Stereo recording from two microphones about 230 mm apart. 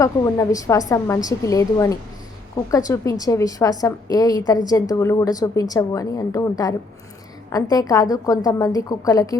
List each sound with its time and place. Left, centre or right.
0.0 s a woman's voice: centre